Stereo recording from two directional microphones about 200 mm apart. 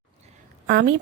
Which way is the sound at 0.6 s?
55° right (ahead or behind).